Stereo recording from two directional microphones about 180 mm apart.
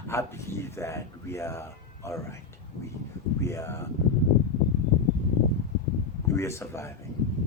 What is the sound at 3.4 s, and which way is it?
Speech, 15° left (ahead or behind).